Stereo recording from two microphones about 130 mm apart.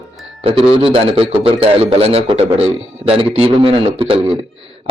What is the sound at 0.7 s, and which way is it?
A man's voice, 45° right (ahead or behind).